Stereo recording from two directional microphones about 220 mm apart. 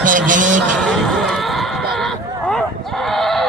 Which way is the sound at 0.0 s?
35° right (ahead or behind).